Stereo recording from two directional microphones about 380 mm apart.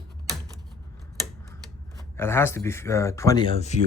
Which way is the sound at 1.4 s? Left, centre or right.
Centre.